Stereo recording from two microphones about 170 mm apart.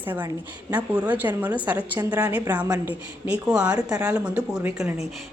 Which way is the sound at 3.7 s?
20° right (ahead or behind).